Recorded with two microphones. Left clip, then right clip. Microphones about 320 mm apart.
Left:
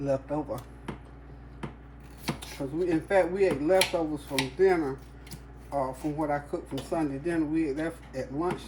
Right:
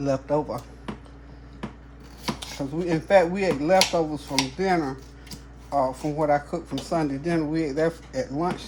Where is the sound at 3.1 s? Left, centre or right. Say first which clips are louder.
Right 6 dB; right.